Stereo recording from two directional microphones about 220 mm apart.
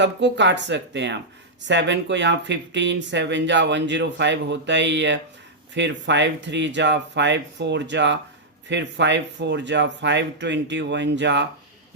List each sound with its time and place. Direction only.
0.0 s speech: 55° right (ahead or behind)